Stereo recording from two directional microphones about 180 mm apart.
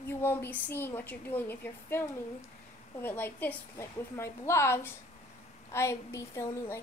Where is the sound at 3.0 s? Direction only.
10° left (ahead or behind).